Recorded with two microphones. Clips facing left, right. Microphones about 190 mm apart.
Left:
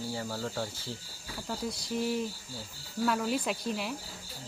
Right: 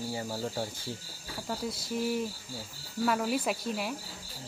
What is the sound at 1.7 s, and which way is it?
Speech, centre (ahead or behind).